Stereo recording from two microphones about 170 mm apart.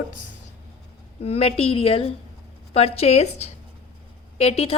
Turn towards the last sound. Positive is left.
turn(degrees=35)  # may be behind; listen again after turning